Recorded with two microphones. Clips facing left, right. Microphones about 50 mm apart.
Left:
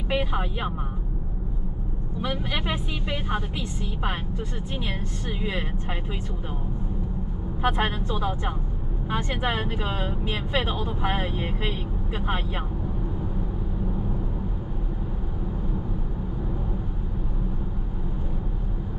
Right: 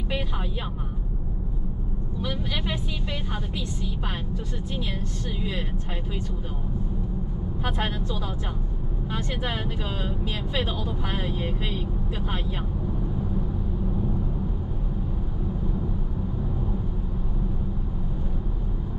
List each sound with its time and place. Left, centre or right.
0.1 s speech: centre
2.2 s speech: left
5.4 s speech: left
7.6 s speech: centre